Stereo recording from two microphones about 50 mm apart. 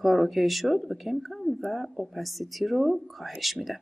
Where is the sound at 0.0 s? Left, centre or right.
Centre.